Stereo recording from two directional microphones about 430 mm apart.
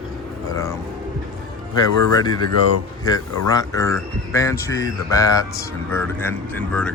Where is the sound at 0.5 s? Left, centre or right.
Centre.